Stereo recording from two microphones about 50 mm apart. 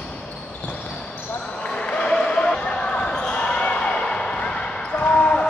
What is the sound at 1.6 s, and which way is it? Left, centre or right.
Basketball bounce, centre.